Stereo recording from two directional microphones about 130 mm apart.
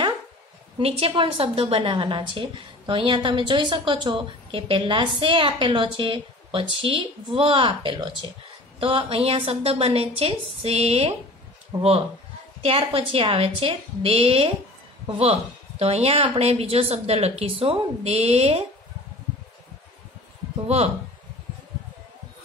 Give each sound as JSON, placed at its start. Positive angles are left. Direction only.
{"t": 0.7, "sound": "a woman's voice", "side_deg": -50}
{"t": 11.7, "sound": "speech", "side_deg": -35}
{"t": 12.6, "sound": "a woman's voice", "side_deg": -50}
{"t": 20.6, "sound": "a woman's voice", "side_deg": -50}